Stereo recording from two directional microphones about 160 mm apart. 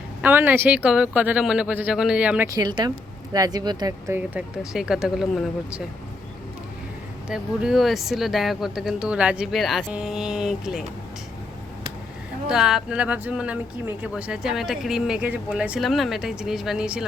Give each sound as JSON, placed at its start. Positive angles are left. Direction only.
{"t": 0.2, "sound": "speech", "side_deg": -10}
{"t": 2.6, "sound": "speech", "side_deg": -25}
{"t": 4.4, "sound": "speech", "side_deg": -5}
{"t": 7.3, "sound": "speech", "side_deg": -5}
{"t": 12.5, "sound": "speech", "side_deg": -5}